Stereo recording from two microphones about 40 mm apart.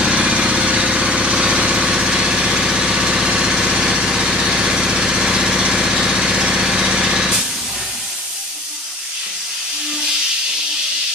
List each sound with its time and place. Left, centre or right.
0.0 s vehicle: centre
3.3 s lawn mower: centre